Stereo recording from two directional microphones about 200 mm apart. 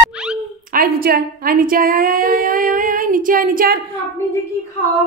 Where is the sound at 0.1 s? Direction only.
5° right (ahead or behind).